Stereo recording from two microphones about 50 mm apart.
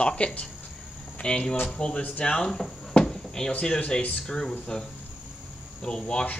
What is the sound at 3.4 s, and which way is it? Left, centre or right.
Speech, left.